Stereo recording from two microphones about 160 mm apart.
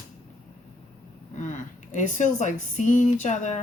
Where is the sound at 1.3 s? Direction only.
50° left (ahead or behind).